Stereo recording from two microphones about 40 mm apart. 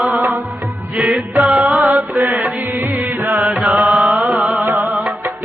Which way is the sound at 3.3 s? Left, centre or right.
Right.